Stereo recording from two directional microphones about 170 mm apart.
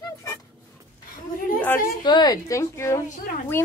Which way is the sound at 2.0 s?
25° left (ahead or behind).